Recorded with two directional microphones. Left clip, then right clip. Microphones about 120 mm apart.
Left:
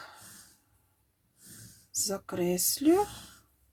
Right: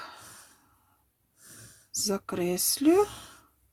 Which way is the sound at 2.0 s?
30° right (ahead or behind).